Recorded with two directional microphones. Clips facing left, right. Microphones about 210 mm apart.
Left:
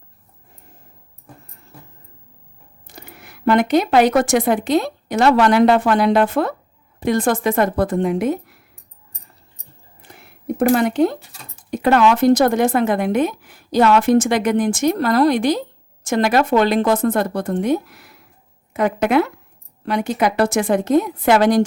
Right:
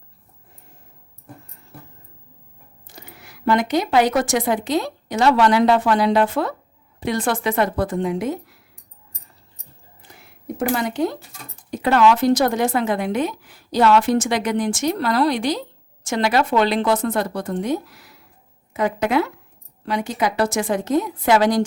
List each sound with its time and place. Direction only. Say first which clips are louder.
2.8 s a woman's voice: left 3 dB; 55° left (ahead or behind)
10.1 s a sound: left 6 dB; 60° left (ahead or behind)
11.7 s a woman's voice: left 2 dB; 50° left (ahead or behind)